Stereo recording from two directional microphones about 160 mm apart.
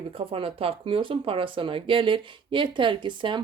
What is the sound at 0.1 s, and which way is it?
Speech, 35° right (ahead or behind).